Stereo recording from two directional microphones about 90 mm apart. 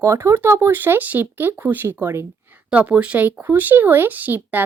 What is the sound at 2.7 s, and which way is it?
Speech, 15° right (ahead or behind).